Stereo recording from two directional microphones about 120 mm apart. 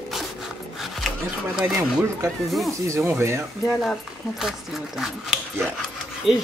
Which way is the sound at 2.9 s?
25° right (ahead or behind).